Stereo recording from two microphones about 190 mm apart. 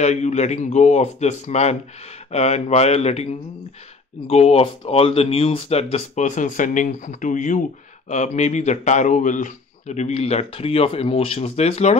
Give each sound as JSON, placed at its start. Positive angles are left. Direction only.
{"t": 0.0, "sound": "speech", "side_deg": 35}